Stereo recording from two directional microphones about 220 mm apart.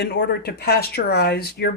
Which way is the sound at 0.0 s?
50° left (ahead or behind).